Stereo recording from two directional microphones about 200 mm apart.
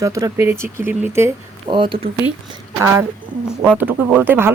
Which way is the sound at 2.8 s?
10° right (ahead or behind).